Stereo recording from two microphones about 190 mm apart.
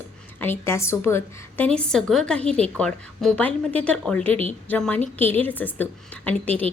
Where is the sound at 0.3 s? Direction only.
10° left (ahead or behind).